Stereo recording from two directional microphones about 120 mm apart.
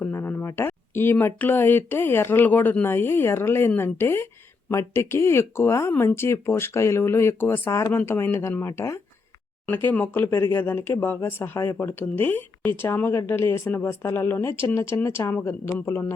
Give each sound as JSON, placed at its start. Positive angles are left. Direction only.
{"t": 0.0, "sound": "speech", "side_deg": 20}